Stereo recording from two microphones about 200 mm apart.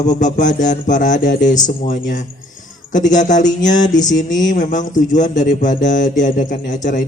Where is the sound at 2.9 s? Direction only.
40° left (ahead or behind).